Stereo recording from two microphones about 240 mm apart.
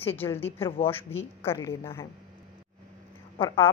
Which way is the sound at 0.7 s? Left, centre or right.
Left.